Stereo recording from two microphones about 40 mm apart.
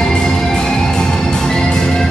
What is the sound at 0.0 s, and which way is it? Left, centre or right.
Music, centre.